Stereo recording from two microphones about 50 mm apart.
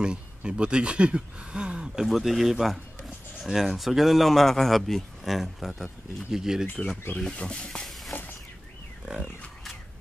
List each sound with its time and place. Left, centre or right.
0.0 s speech: centre
2.0 s speech: centre
7.3 s speech: centre
8.1 s a sound: left
9.1 s speech: centre